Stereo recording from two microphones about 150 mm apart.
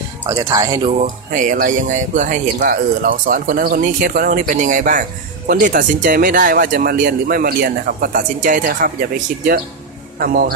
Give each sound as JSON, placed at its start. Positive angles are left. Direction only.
{"t": 0.3, "sound": "speech", "side_deg": -25}
{"t": 1.0, "sound": "speech", "side_deg": -60}
{"t": 10.2, "sound": "speech", "side_deg": -75}